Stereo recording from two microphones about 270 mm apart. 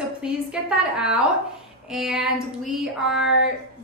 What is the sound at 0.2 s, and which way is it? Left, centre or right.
A woman's voice, centre.